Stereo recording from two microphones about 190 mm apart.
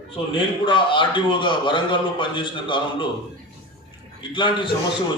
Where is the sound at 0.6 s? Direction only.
25° left (ahead or behind).